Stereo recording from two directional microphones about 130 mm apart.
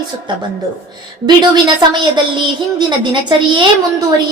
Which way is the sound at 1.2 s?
35° right (ahead or behind).